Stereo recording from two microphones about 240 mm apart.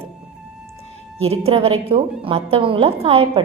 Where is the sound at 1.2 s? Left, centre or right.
Right.